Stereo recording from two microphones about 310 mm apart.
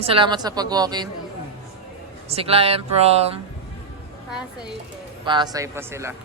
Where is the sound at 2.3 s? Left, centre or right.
Centre.